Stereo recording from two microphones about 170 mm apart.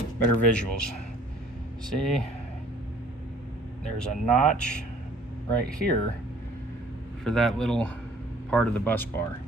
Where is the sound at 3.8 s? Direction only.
5° left (ahead or behind).